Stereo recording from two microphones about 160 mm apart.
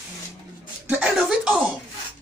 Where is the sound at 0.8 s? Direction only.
5° right (ahead or behind).